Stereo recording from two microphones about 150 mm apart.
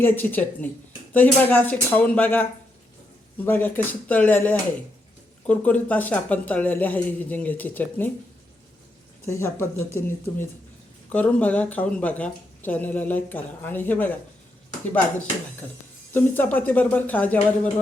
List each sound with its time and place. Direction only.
0.0 s speech: 10° left (ahead or behind)
9.2 s speech: 20° left (ahead or behind)
16.1 s speech: 10° left (ahead or behind)